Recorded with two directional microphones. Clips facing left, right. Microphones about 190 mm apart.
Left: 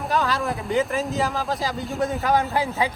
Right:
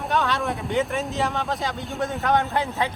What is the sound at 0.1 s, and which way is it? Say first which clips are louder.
Speech: even; centre (ahead or behind).